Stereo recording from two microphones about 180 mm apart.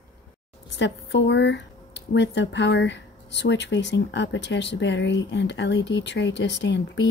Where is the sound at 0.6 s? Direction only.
75° left (ahead or behind).